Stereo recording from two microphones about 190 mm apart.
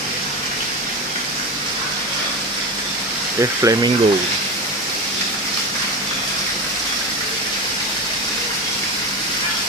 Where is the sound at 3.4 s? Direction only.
15° right (ahead or behind).